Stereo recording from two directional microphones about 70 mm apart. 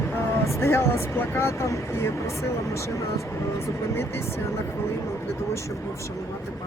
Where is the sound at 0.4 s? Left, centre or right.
Left.